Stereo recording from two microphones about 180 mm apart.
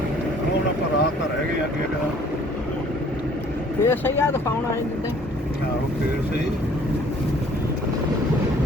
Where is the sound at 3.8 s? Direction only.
10° left (ahead or behind).